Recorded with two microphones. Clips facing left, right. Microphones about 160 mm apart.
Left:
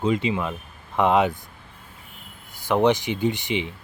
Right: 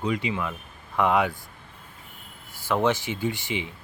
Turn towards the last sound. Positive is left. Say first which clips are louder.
# left 5 dB
turn(degrees=20)  # may be behind; listen again after turning